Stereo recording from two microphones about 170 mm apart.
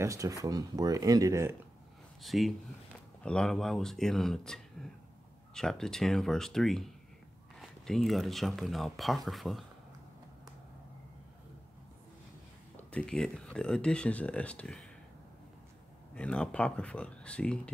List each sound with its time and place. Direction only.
0.0 s speech: 20° right (ahead or behind)
2.2 s speech: centre (ahead or behind)
12.7 s speech: 5° left (ahead or behind)
16.2 s speech: 5° left (ahead or behind)